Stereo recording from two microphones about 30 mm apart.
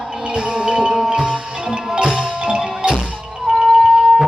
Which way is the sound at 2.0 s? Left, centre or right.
Right.